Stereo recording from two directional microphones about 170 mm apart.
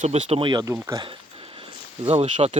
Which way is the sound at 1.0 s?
30° right (ahead or behind).